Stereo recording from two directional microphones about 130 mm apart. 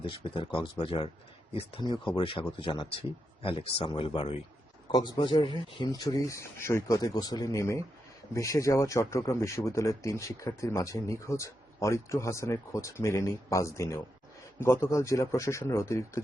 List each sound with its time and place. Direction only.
0.0 s speech: 40° left (ahead or behind)
4.9 s speech: 30° left (ahead or behind)